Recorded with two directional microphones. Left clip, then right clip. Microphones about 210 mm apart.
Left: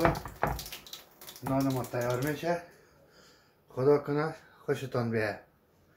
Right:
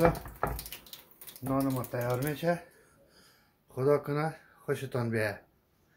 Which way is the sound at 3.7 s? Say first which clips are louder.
Left 2 dB; 30° right (ahead or behind).